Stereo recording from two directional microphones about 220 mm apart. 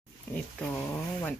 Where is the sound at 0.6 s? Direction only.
10° left (ahead or behind).